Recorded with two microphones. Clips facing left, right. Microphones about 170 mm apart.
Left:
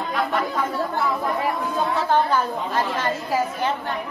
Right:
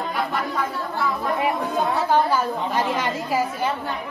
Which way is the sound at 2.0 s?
10° right (ahead or behind).